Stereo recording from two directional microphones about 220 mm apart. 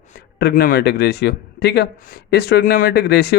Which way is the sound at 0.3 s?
45° left (ahead or behind).